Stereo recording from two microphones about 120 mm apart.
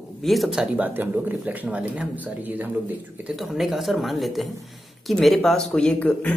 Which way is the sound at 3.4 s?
Centre (ahead or behind).